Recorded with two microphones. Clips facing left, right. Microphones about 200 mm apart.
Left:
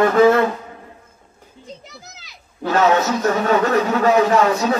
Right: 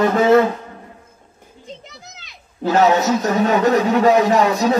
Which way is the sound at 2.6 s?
20° right (ahead or behind).